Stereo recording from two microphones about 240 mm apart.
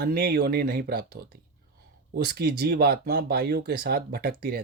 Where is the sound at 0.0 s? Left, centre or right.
Right.